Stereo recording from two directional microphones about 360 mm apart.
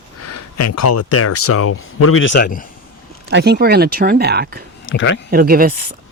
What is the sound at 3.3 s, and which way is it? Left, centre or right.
Speech, right.